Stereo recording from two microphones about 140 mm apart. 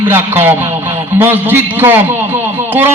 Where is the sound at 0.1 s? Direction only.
15° right (ahead or behind).